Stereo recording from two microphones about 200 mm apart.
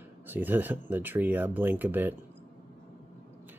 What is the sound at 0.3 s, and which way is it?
Speech, 10° right (ahead or behind).